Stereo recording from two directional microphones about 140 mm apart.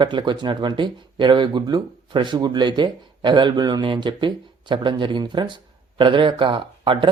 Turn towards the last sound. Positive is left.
turn(degrees=-35)  # may be behind; listen again after turning